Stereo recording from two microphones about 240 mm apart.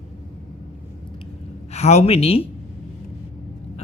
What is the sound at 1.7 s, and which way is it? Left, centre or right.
Speech, left.